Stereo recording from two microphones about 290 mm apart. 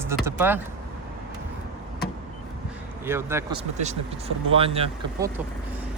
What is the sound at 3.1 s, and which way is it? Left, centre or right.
Speech, centre.